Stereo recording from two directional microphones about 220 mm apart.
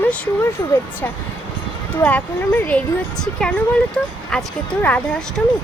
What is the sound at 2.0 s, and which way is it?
A woman's voice, 5° left (ahead or behind).